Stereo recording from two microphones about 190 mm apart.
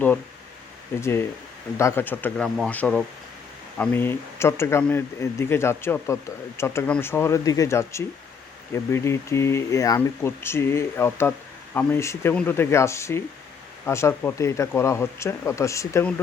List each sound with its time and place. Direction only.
1.8 s speech: 10° left (ahead or behind)